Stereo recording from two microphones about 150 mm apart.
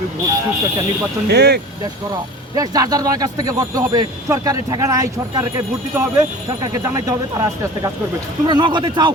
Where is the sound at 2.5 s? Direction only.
25° right (ahead or behind).